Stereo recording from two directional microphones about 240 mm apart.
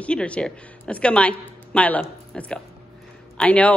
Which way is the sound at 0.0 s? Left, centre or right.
Centre.